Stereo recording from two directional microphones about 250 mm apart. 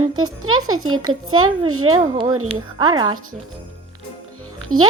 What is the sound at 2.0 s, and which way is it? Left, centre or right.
Speech, centre.